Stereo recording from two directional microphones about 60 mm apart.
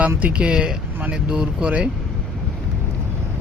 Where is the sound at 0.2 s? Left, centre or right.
Right.